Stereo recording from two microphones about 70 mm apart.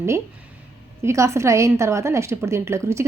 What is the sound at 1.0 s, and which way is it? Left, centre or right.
A woman's voice, right.